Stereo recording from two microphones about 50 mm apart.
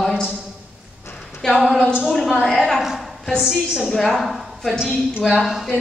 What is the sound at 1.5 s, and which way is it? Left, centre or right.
A woman's voice, centre.